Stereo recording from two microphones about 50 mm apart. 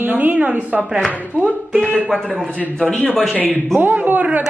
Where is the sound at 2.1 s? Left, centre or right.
Centre.